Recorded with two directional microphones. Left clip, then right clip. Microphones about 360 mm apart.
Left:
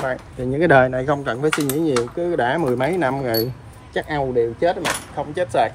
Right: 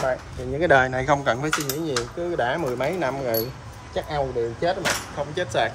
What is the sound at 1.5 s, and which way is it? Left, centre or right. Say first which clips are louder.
Speech: left 6 dB; centre.